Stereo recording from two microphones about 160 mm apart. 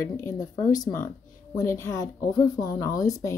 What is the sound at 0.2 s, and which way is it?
A woman's voice, 20° left (ahead or behind).